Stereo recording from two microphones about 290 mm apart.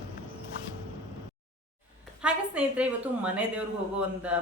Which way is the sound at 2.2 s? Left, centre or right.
Centre.